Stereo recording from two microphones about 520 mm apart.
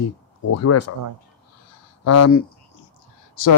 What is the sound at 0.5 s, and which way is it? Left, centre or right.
Speech, left.